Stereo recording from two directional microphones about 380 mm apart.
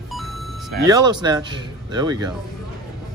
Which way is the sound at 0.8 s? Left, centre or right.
Centre.